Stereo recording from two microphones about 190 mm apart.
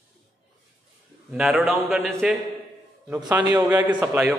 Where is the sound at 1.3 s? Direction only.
5° right (ahead or behind).